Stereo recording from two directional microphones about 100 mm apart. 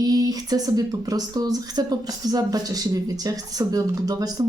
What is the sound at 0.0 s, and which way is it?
Speech, 40° right (ahead or behind).